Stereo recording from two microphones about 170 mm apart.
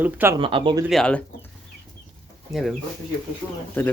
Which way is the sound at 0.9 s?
5° left (ahead or behind).